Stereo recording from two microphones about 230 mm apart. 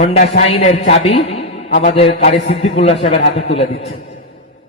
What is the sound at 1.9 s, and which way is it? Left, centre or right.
Speech, left.